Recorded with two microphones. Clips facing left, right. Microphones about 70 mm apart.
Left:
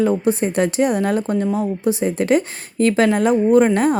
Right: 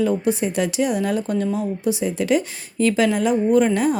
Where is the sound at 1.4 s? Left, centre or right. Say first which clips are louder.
Left 3 dB; left.